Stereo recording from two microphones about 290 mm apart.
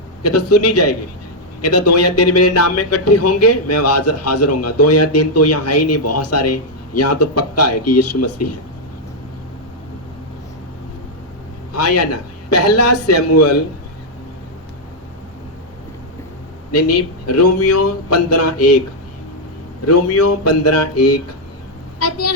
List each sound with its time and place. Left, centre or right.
0.2 s a man's voice: left
11.8 s speech: left
16.7 s speech: left
19.9 s a woman's voice: left